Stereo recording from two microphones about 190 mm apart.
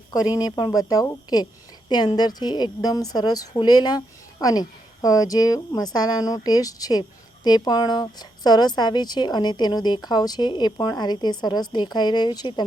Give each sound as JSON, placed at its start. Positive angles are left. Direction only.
{"t": 0.1, "sound": "speech", "side_deg": 20}